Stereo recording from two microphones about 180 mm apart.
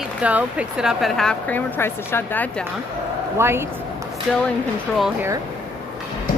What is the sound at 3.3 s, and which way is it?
Speech, 15° right (ahead or behind).